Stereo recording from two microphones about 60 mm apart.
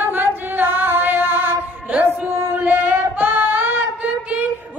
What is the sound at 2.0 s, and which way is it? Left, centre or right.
Singing, right.